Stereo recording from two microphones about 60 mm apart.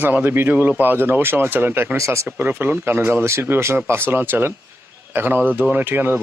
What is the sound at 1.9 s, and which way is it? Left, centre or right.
Speech, right.